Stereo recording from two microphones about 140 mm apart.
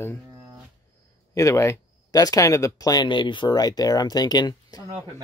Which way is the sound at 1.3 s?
20° left (ahead or behind).